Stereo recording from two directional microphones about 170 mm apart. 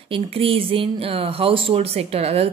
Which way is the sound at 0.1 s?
35° right (ahead or behind).